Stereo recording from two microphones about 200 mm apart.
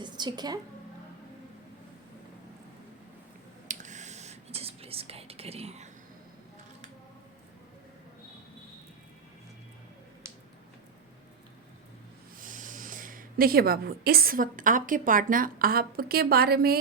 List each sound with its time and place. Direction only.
0.0 s a sound: 20° right (ahead or behind)
3.7 s whispering: 35° right (ahead or behind)
12.4 s speech: 40° right (ahead or behind)